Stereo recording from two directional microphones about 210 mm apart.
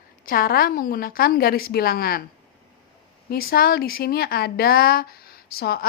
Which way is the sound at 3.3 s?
45° left (ahead or behind).